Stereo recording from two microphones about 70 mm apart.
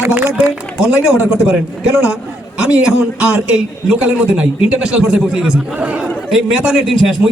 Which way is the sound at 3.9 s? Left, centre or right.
Centre.